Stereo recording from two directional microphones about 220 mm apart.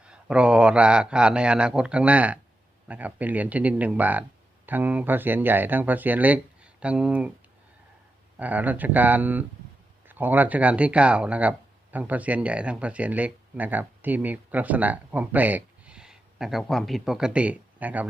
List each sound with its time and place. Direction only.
0.0 s a man's voice: 5° right (ahead or behind)
8.4 s speech: 5° right (ahead or behind)